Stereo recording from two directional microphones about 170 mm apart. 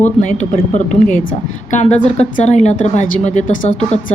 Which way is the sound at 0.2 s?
45° left (ahead or behind).